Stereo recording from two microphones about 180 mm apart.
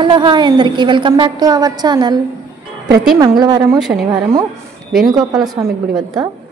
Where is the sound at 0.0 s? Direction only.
25° right (ahead or behind).